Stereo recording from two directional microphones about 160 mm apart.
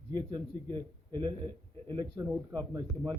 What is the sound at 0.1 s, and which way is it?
A man's voice, 25° right (ahead or behind).